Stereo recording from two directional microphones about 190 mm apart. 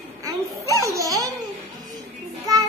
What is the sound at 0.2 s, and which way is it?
Baby laughter, 15° right (ahead or behind).